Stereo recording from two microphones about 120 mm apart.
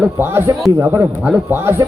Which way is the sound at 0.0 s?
20° right (ahead or behind).